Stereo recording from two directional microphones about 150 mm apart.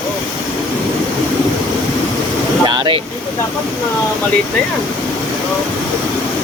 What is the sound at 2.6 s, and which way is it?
Speech, 30° right (ahead or behind).